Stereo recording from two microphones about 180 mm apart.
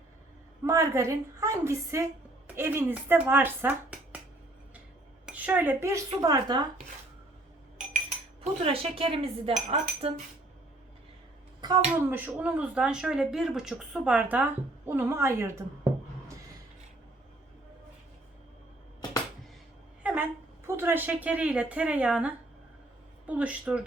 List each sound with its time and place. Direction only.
0.6 s speech: 15° right (ahead or behind)
5.2 s speech: 10° right (ahead or behind)
8.6 s cutlery: 30° right (ahead or behind)
11.9 s speech: 10° right (ahead or behind)
20.0 s a sound: 10° right (ahead or behind)
23.2 s speech: 5° right (ahead or behind)